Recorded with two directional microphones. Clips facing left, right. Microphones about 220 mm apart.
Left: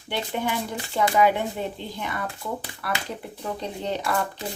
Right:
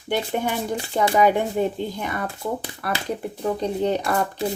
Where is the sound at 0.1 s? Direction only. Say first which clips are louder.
Right 4 dB; 45° right (ahead or behind).